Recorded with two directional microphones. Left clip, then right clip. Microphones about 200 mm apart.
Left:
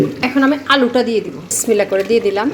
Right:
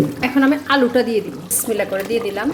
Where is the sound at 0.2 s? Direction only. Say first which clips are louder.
Left 2 dB; centre (ahead or behind).